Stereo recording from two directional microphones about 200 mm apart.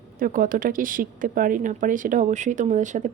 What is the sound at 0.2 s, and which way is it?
A woman's voice, 45° right (ahead or behind).